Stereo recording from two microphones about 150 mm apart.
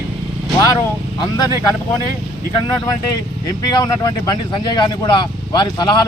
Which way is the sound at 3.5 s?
25° left (ahead or behind).